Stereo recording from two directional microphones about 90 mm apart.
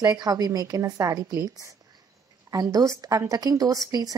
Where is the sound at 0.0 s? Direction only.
45° right (ahead or behind).